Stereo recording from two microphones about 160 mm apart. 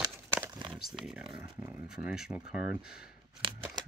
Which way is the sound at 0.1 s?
15° right (ahead or behind).